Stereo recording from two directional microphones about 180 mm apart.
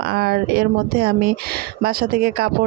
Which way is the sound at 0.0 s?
60° right (ahead or behind).